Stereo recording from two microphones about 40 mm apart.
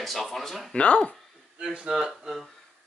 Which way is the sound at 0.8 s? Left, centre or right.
Left.